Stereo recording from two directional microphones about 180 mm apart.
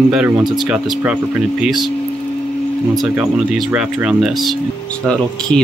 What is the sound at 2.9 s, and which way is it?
Speech, centre (ahead or behind).